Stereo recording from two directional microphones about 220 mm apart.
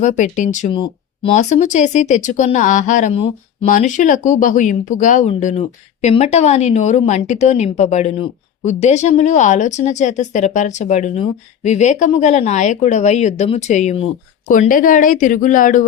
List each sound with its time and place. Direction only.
0.0 s speech: 35° left (ahead or behind)
0.7 s speech: 25° left (ahead or behind)